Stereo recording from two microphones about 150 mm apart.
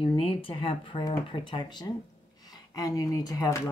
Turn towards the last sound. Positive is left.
turn(degrees=20)  # may be behind; listen again after turning